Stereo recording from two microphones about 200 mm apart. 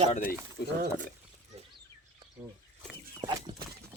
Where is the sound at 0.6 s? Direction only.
55° left (ahead or behind).